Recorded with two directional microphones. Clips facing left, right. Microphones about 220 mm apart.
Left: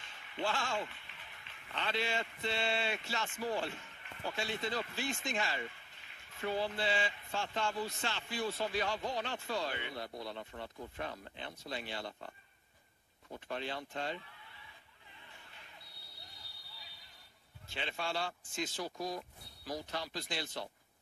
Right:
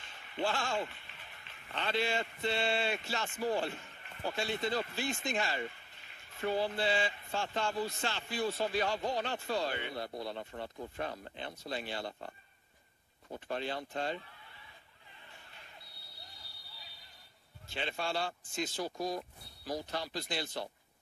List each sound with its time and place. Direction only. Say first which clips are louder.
0.0 s speech: right 3 dB; 40° right (ahead or behind)
17.7 s speech: right 3 dB; 35° right (ahead or behind)